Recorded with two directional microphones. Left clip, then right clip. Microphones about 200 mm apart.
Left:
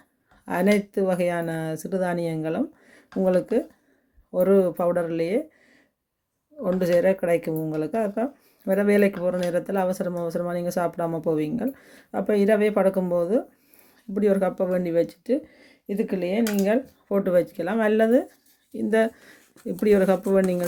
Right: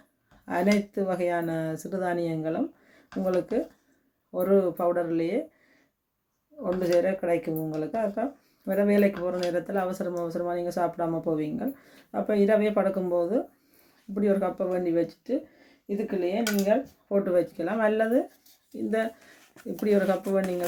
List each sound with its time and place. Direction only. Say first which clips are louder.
0.4 s speech: left 3 dB; 45° left (ahead or behind)
6.6 s speech: left 3 dB; 50° left (ahead or behind)